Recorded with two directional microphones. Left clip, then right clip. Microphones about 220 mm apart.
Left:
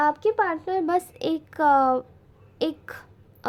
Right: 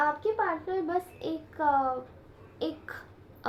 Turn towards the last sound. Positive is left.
turn(degrees=45)  # may be behind; listen again after turning